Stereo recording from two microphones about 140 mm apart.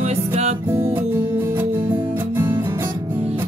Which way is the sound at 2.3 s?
15° right (ahead or behind).